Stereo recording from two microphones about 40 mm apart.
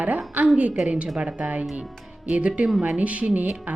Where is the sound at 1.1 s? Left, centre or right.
Right.